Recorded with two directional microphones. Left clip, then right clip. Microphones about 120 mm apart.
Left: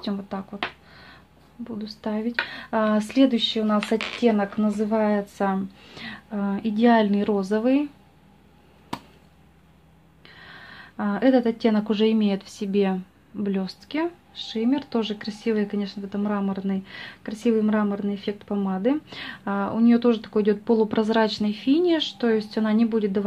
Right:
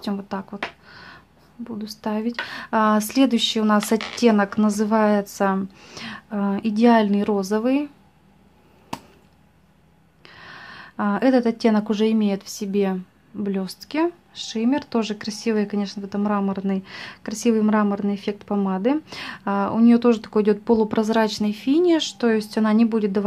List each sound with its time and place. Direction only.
0.0 s speech: 30° right (ahead or behind)
1.6 s speech: 25° right (ahead or behind)
3.3 s speech: 40° right (ahead or behind); by 7.9 s 20° right (ahead or behind)
10.2 s speech: 35° right (ahead or behind); by 13.7 s 15° right (ahead or behind)
13.7 s speech: 30° right (ahead or behind)